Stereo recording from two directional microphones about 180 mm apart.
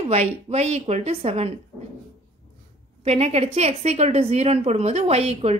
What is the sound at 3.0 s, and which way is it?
A woman's voice, 35° right (ahead or behind).